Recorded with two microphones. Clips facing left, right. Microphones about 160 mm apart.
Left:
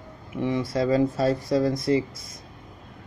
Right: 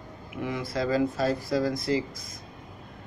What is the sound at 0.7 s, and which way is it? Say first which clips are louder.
Speech: left 2 dB; 25° left (ahead or behind).